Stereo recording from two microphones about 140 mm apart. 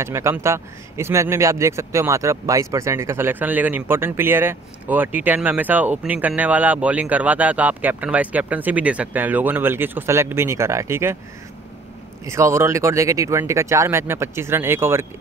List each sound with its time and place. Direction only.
0.0 s speech: 20° right (ahead or behind)
12.3 s speech: 20° right (ahead or behind)